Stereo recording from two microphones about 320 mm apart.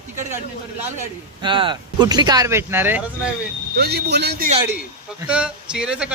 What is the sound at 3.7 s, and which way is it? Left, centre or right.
Speech, right.